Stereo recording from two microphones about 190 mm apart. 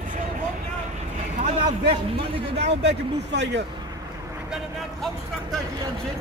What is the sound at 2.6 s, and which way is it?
Speech, 65° right (ahead or behind).